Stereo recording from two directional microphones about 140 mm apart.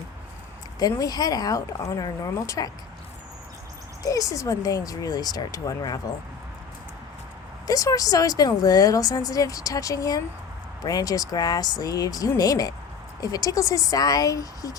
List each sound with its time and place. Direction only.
0.8 s a woman's voice: 25° left (ahead or behind)
4.0 s a woman's voice: 25° left (ahead or behind)
7.7 s a woman's voice: 25° left (ahead or behind)